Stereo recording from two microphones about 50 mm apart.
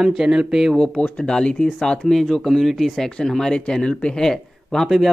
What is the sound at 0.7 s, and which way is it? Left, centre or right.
Speech, centre.